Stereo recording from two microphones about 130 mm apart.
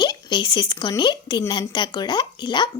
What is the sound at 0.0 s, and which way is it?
Speech, 35° left (ahead or behind).